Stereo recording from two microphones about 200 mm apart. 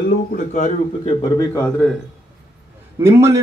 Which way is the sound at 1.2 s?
20° left (ahead or behind).